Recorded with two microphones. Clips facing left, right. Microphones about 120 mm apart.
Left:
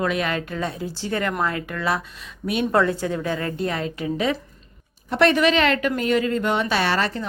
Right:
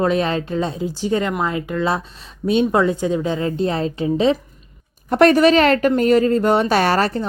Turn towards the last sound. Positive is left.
turn(degrees=-40)  # may be behind; listen again after turning